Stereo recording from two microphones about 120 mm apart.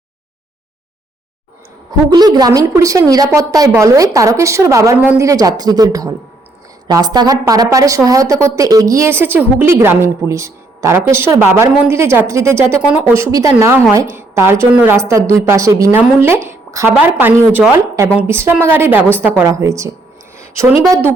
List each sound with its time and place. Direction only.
2.1 s a woman's voice: 35° right (ahead or behind)